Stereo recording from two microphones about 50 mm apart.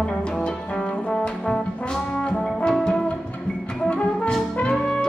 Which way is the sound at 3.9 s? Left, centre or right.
Left.